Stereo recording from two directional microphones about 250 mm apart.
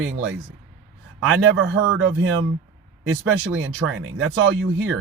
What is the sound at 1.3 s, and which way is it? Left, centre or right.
Speech, right.